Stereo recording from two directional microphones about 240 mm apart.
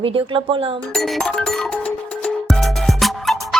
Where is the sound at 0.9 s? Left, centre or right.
Centre.